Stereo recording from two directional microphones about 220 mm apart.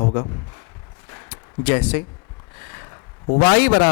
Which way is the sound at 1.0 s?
15° left (ahead or behind).